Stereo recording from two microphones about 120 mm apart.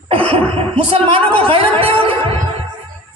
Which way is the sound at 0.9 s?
45° right (ahead or behind).